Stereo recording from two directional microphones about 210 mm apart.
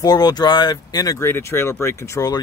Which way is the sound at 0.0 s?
20° left (ahead or behind).